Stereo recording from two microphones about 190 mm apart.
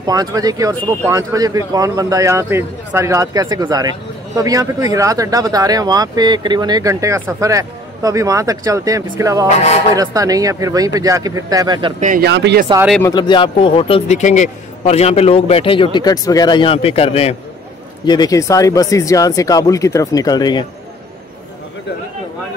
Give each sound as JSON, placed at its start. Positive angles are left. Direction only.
{"t": 0.0, "sound": "speech", "side_deg": -20}
{"t": 9.5, "sound": "music", "side_deg": 35}
{"t": 9.9, "sound": "speech", "side_deg": -20}
{"t": 12.0, "sound": "speech", "side_deg": -45}
{"t": 12.3, "sound": "speech", "side_deg": -65}
{"t": 13.0, "sound": "a man's voice", "side_deg": 25}
{"t": 18.0, "sound": "speech", "side_deg": 20}